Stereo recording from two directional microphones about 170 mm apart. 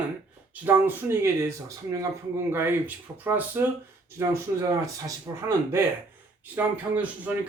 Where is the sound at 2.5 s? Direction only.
10° right (ahead or behind).